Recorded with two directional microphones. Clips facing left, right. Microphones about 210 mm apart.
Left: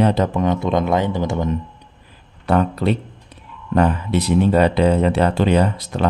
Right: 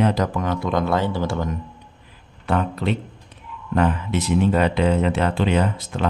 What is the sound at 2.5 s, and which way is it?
Speech, 40° left (ahead or behind).